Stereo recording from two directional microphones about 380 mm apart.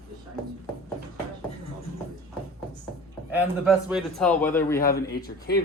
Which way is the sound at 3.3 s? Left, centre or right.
Centre.